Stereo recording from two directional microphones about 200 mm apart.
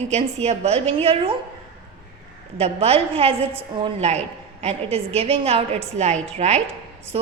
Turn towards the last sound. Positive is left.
turn(degrees=-35)  # may be behind; listen again after turning